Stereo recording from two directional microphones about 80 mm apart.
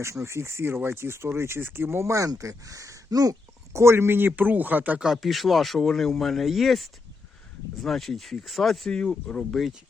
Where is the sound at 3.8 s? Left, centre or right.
Right.